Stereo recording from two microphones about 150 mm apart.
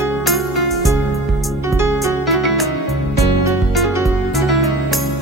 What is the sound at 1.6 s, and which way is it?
Music, 15° right (ahead or behind).